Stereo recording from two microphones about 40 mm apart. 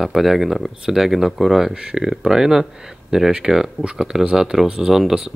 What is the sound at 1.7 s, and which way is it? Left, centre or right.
Speech, right.